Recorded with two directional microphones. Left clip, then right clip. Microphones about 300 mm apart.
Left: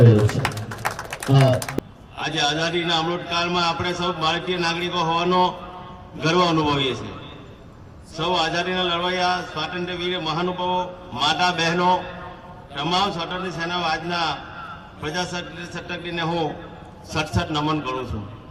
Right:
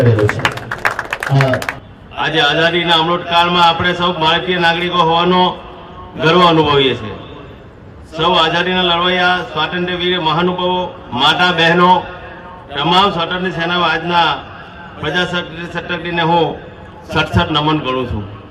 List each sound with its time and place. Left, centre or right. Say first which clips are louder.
0.4 s a sound: right 10 dB; left
2.2 s a man's voice: right 10 dB; left
8.1 s a man's voice: right 9 dB; left